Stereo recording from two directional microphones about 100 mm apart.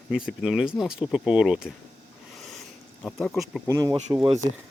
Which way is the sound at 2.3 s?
Centre (ahead or behind).